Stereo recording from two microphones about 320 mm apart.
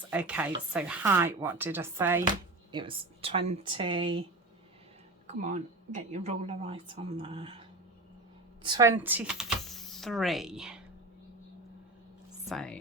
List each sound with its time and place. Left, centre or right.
0.1 s speech: centre
5.3 s speech: right
8.6 s speech: centre
12.4 s speech: centre